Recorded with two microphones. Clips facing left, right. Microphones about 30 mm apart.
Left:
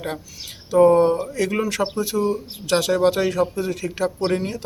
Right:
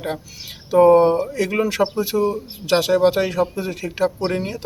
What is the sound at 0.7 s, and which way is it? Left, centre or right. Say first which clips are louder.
Speech: right 2 dB; centre.